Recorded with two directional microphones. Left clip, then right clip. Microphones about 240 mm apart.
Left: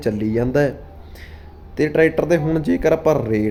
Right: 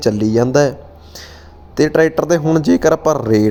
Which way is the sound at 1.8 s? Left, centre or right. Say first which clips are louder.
Right 3 dB; centre.